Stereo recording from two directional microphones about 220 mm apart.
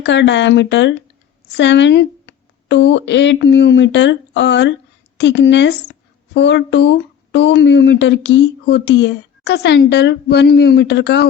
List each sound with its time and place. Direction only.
0.0 s speech: 55° left (ahead or behind)